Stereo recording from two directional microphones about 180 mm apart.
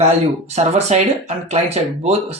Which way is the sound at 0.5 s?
40° right (ahead or behind).